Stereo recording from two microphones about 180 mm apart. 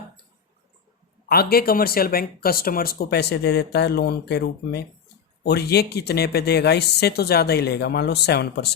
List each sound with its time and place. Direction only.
1.3 s speech: 60° left (ahead or behind)